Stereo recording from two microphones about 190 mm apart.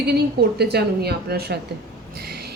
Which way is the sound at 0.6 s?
60° right (ahead or behind).